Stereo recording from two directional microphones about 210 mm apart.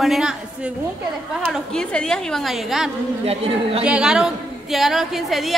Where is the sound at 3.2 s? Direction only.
30° right (ahead or behind).